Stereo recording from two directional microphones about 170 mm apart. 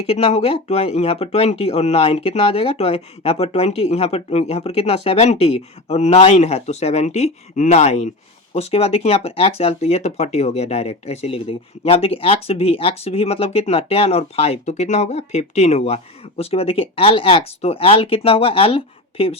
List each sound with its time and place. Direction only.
0.1 s speech: 35° left (ahead or behind)